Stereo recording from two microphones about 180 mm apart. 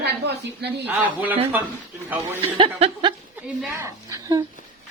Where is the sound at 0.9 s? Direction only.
10° right (ahead or behind).